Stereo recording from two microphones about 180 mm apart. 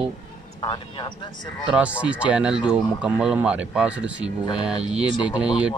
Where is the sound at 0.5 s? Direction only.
25° left (ahead or behind).